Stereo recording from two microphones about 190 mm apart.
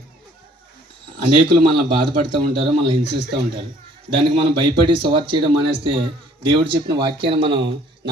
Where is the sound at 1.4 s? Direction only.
25° right (ahead or behind).